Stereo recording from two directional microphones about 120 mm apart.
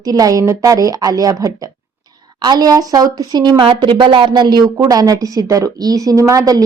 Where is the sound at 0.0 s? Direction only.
30° right (ahead or behind).